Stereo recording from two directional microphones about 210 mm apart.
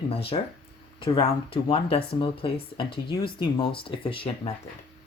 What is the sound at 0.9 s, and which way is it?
Speech, 25° left (ahead or behind).